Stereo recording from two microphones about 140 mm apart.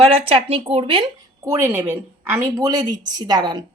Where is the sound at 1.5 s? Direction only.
20° right (ahead or behind).